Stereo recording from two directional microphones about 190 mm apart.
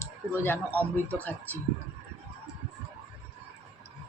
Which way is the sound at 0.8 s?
10° left (ahead or behind).